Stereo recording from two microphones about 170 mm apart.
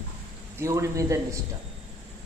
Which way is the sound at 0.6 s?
15° right (ahead or behind).